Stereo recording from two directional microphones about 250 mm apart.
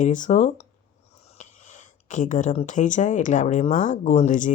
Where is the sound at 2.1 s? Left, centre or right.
Left.